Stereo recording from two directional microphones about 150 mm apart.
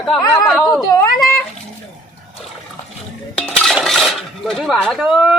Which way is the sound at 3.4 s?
5° left (ahead or behind).